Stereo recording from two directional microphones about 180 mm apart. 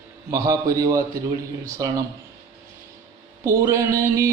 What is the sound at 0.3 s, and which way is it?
Music, 15° right (ahead or behind).